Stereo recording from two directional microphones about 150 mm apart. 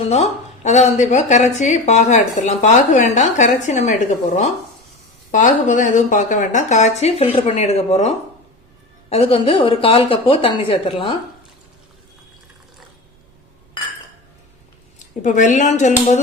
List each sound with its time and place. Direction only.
0.1 s a woman's voice: 45° left (ahead or behind)
5.3 s a woman's voice: 55° left (ahead or behind); by 11.2 s 35° left (ahead or behind)
14.9 s a woman's voice: 55° left (ahead or behind)